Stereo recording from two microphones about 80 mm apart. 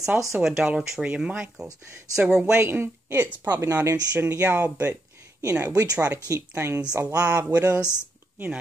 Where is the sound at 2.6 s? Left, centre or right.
Right.